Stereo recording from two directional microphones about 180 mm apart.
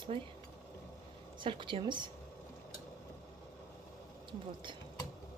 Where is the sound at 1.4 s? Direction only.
25° right (ahead or behind).